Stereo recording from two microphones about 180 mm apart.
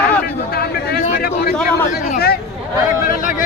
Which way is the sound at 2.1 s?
60° left (ahead or behind).